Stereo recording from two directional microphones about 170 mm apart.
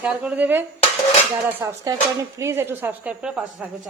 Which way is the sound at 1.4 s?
20° right (ahead or behind).